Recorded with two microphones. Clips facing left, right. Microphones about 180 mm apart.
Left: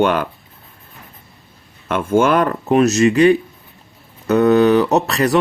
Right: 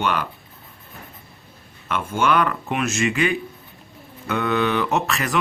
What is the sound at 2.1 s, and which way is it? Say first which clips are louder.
Speech: left 6 dB; 45° left (ahead or behind).